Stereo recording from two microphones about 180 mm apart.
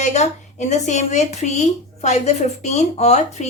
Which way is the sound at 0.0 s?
40° left (ahead or behind).